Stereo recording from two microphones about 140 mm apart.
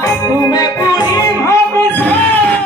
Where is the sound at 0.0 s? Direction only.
25° left (ahead or behind).